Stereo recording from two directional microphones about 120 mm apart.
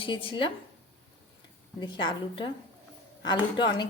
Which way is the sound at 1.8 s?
40° left (ahead or behind).